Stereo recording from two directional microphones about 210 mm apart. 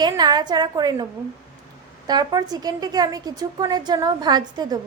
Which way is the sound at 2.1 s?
20° right (ahead or behind).